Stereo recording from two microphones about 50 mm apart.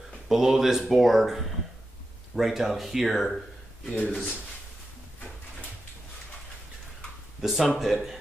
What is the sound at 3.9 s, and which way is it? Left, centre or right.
Speech, left.